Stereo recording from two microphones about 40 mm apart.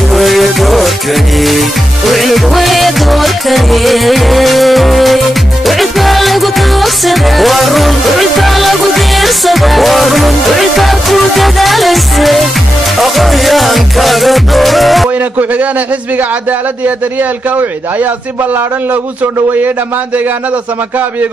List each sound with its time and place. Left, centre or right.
0.1 s music: centre
15.0 s a sound: right
17.2 s a man's voice: right